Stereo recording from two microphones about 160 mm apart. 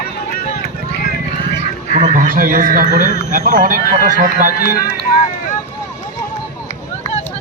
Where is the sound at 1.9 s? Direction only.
50° right (ahead or behind).